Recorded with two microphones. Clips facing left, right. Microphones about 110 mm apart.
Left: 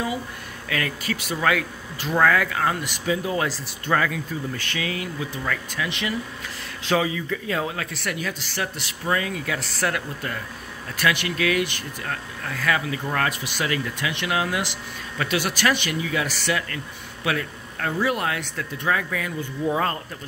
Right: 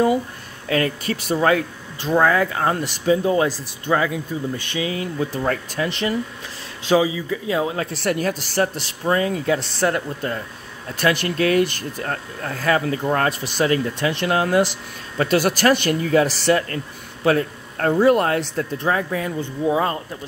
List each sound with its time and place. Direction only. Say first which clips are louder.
0.7 s speech: right 6 dB; 35° right (ahead or behind)
3.4 s speech: right 4 dB; 15° right (ahead or behind); by 6.1 s 35° right (ahead or behind)
6.9 s speech: right 5 dB; 15° right (ahead or behind)
19.7 s speech: right 4 dB; 20° right (ahead or behind)